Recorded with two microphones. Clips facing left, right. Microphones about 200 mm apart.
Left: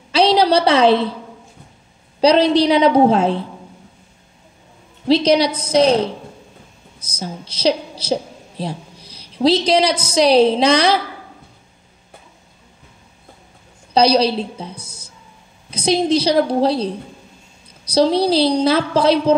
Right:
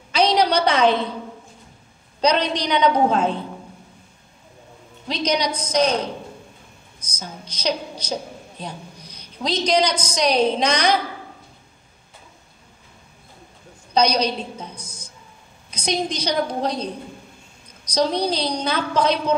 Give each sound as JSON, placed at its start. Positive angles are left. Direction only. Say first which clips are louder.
{"t": 0.1, "sound": "a sound", "louder": "left 4 dB", "side_deg": 30}
{"t": 2.2, "sound": "a woman's voice", "louder": "left 8 dB", "side_deg": 30}
{"t": 5.0, "sound": "a woman's voice", "louder": "left 9 dB", "side_deg": 30}
{"t": 7.2, "sound": "a woman's voice", "louder": "left 7 dB", "side_deg": 30}
{"t": 13.9, "sound": "a woman's voice", "louder": "left 5 dB", "side_deg": 30}
{"t": 17.9, "sound": "a woman's voice", "louder": "left 7 dB", "side_deg": 30}